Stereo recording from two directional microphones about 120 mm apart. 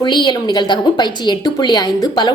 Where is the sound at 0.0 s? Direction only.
40° left (ahead or behind).